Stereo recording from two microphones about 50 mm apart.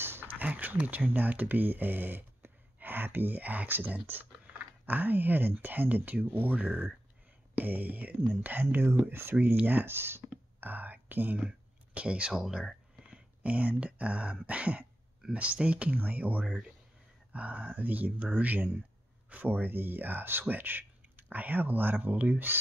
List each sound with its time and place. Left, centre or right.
0.0 s a sound: right
0.4 s speech: right
9.0 s speech: right
9.3 s speech: right
9.8 s speech: right
10.6 s speech: right
11.3 s speech: right
13.0 s speech: right